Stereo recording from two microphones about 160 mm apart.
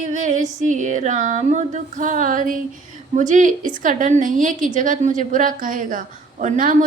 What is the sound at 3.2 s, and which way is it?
A woman's voice, 50° right (ahead or behind).